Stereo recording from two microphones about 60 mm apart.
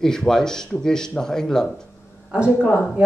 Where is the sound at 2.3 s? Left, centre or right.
Centre.